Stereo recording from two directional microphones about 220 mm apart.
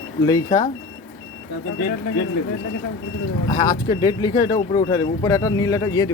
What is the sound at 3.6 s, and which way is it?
Speech, 40° left (ahead or behind).